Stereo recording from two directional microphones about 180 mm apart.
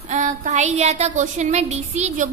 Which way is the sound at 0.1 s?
45° right (ahead or behind).